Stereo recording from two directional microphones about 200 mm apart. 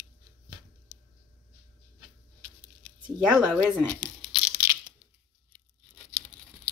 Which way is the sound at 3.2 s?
Centre (ahead or behind).